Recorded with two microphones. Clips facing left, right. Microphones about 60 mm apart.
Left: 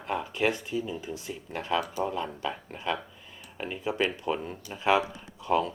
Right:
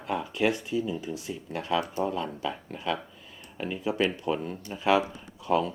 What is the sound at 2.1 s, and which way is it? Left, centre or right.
Speech, centre.